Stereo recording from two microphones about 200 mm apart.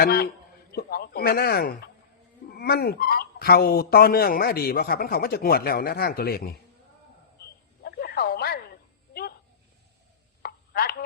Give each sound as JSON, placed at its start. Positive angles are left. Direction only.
{"t": 0.0, "sound": "speech", "side_deg": 50}
{"t": 7.8, "sound": "radio", "side_deg": 50}
{"t": 10.4, "sound": "chop", "side_deg": 50}